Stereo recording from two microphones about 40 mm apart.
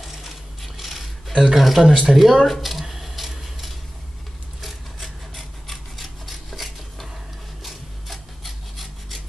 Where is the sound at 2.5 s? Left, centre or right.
Centre.